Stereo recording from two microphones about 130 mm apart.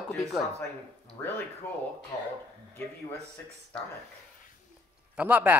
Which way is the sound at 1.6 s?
15° left (ahead or behind).